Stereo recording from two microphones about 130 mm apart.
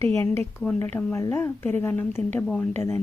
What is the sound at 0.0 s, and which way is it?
A woman's voice, 20° left (ahead or behind).